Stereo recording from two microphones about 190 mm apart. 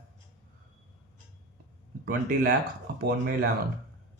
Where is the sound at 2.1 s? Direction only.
50° right (ahead or behind).